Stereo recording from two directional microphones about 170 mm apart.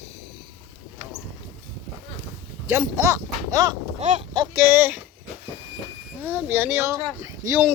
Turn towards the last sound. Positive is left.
turn(degrees=-15)  # may be behind; listen again after turning